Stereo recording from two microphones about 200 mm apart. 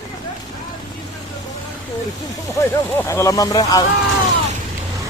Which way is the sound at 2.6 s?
15° left (ahead or behind).